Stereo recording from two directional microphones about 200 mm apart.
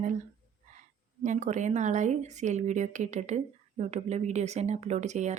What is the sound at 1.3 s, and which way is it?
Speech, 35° right (ahead or behind).